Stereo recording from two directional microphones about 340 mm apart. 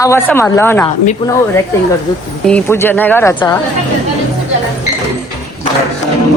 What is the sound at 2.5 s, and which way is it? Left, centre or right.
Speech, centre.